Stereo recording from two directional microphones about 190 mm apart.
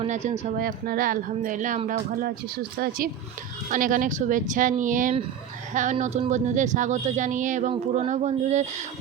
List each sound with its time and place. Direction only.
0.0 s speech: 40° right (ahead or behind)
3.7 s speech: 45° right (ahead or behind)